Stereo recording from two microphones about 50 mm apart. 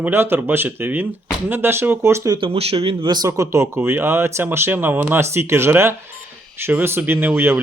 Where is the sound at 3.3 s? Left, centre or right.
Right.